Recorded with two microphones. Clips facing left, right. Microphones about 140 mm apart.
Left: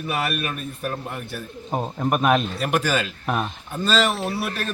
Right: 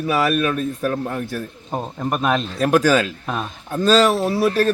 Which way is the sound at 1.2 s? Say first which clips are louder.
Right 7 dB; 40° right (ahead or behind).